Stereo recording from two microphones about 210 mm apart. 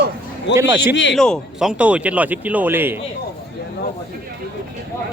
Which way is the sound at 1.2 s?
5° left (ahead or behind).